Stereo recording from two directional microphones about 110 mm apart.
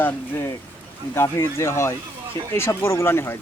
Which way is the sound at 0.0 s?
20° left (ahead or behind).